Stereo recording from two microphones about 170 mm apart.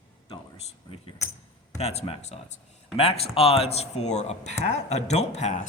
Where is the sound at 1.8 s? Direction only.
40° left (ahead or behind).